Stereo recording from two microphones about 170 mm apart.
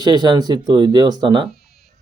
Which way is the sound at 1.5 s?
65° left (ahead or behind).